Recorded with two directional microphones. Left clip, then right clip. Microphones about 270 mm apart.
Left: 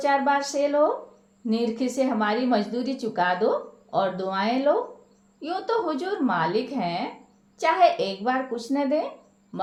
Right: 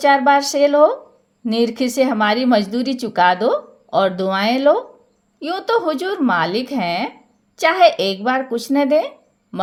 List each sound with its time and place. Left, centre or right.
0.0 s speech: right